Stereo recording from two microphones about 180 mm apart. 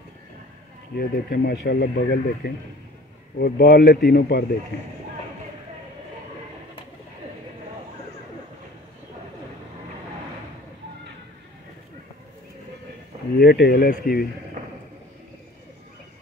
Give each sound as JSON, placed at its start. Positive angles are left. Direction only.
{"t": 0.9, "sound": "speech", "side_deg": 65}
{"t": 13.4, "sound": "speech", "side_deg": 60}
{"t": 14.6, "sound": "a sound", "side_deg": -45}